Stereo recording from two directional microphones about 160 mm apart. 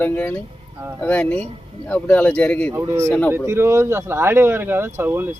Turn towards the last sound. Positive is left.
turn(degrees=-15)  # may be behind; listen again after turning